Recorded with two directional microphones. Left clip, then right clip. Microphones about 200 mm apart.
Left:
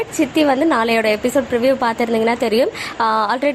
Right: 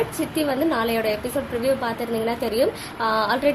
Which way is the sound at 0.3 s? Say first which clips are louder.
Left 7 dB; 25° left (ahead or behind).